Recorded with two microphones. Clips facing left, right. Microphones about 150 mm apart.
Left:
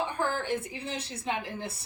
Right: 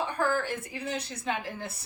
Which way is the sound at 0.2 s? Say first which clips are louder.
Right 1 dB; 20° left (ahead or behind).